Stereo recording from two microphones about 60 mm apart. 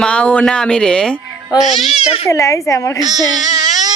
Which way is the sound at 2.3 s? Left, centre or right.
Left.